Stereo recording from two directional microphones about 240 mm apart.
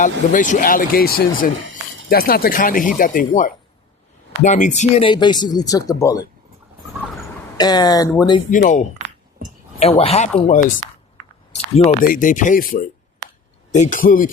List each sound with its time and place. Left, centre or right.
0.0 s speech: left; by 6.2 s centre
7.5 s speech: centre
8.4 s speech: left